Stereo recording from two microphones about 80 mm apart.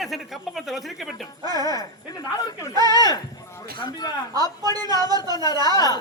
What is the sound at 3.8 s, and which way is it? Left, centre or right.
Speech, left.